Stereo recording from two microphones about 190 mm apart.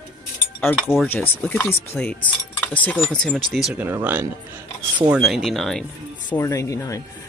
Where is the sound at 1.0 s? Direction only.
10° left (ahead or behind).